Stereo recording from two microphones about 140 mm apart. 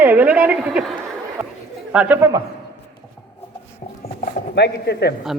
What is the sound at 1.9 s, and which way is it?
Speech, 10° right (ahead or behind).